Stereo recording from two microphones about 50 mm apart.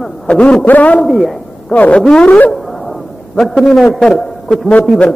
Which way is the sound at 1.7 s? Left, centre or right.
Left.